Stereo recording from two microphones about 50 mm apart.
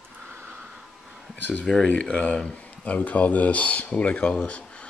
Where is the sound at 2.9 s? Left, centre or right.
Left.